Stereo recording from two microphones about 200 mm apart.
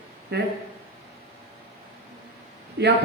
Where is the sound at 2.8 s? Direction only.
60° right (ahead or behind).